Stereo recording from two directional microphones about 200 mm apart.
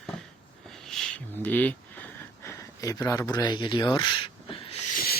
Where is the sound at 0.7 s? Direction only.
5° left (ahead or behind); by 4.8 s 25° left (ahead or behind).